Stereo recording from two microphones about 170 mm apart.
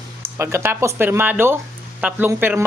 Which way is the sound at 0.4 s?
15° right (ahead or behind).